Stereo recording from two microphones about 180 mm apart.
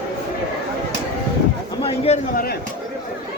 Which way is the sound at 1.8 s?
35° left (ahead or behind).